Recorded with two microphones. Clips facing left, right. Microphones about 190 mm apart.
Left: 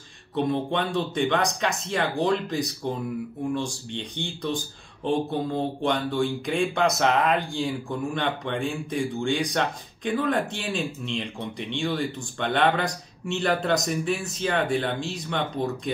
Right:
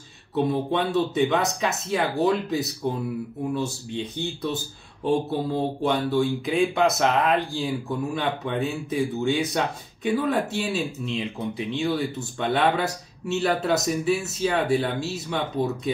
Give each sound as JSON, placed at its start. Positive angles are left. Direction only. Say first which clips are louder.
{"t": 0.4, "sound": "speech", "louder": "right 2 dB", "side_deg": -5}